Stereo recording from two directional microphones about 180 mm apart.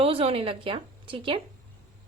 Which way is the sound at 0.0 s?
35° right (ahead or behind).